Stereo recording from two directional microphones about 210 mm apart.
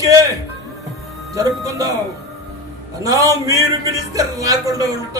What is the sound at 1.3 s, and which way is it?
Speech, 15° right (ahead or behind).